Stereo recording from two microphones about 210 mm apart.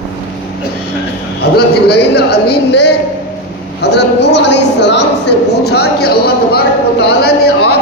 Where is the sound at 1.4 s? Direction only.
50° left (ahead or behind).